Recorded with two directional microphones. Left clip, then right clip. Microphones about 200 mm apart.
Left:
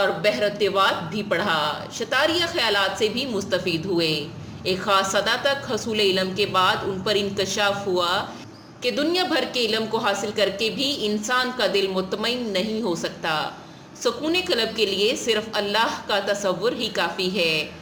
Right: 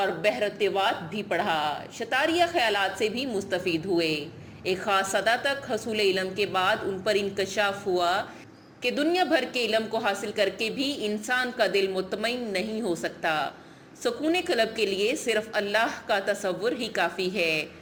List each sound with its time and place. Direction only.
0.0 s a woman's voice: 20° right (ahead or behind)